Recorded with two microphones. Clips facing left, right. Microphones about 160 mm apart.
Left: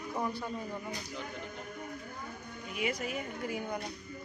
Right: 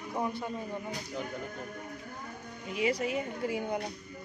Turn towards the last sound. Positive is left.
turn(degrees=-25)  # may be behind; listen again after turning